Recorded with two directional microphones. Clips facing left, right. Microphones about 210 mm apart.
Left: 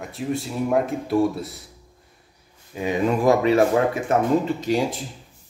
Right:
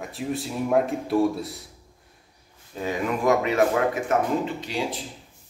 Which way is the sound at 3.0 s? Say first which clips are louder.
Left 4 dB; 30° left (ahead or behind).